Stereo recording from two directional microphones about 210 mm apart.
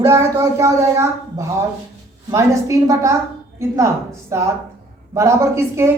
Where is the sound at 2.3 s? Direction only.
15° right (ahead or behind).